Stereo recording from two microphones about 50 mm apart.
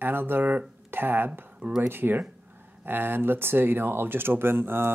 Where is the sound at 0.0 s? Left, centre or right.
Right.